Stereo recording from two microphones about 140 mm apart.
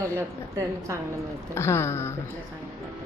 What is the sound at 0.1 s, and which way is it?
Speech, 20° right (ahead or behind).